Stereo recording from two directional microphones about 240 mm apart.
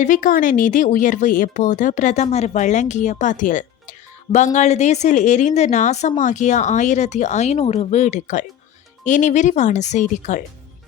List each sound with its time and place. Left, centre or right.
0.0 s a woman's voice: left